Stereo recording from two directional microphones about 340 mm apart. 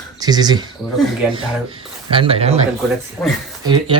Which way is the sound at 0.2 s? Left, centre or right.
Centre.